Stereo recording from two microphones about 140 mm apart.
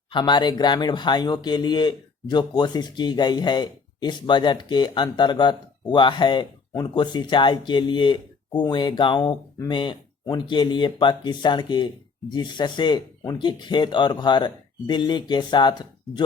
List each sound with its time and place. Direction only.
0.1 s speech: 35° left (ahead or behind)